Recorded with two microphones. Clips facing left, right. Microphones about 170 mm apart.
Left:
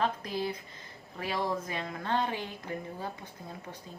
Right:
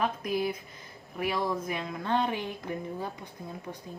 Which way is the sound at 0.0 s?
15° right (ahead or behind).